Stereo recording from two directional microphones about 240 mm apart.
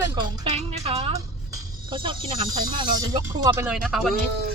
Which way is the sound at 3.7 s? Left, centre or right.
Centre.